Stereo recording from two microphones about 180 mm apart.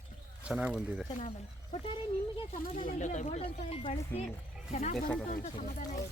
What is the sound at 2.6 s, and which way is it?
A woman's voice, 50° left (ahead or behind).